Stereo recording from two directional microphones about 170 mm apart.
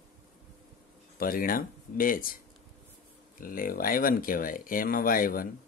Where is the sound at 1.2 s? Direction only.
55° left (ahead or behind).